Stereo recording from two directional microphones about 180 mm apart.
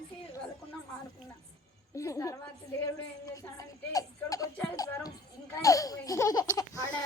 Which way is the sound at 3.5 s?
20° left (ahead or behind).